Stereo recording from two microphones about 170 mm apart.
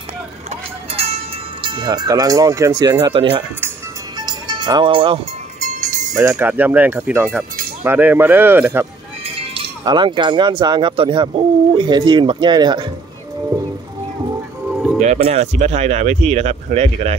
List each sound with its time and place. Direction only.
0.5 s vehicle: 35° right (ahead or behind)
1.6 s speech: 30° right (ahead or behind)
4.2 s music: 25° right (ahead or behind)
5.6 s jingle bell: 45° right (ahead or behind)
6.1 s speech: 10° right (ahead or behind)
9.2 s speech: 35° right (ahead or behind)
14.7 s music: centre (ahead or behind)
15.0 s speech: 40° right (ahead or behind)